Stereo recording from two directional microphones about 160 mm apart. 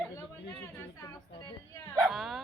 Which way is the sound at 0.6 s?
15° left (ahead or behind).